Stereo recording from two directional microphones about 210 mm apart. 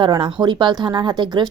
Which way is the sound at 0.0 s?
20° right (ahead or behind).